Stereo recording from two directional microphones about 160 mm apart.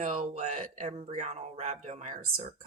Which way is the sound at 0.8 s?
40° right (ahead or behind).